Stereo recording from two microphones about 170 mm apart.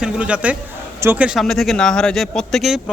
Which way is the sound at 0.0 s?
5° right (ahead or behind).